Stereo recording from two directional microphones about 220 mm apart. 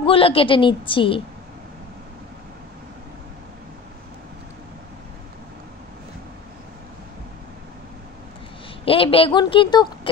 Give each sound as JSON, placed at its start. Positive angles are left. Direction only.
{"t": 0.0, "sound": "a woman's voice", "side_deg": 25}
{"t": 8.8, "sound": "a woman's voice", "side_deg": 25}